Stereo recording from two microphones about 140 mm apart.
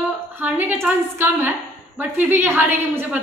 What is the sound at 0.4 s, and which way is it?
A woman's voice, 15° right (ahead or behind).